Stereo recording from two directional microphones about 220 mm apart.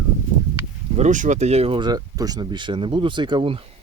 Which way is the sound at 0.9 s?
35° right (ahead or behind).